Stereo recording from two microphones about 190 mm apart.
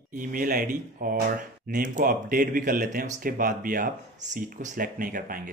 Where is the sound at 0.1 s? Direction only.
45° right (ahead or behind).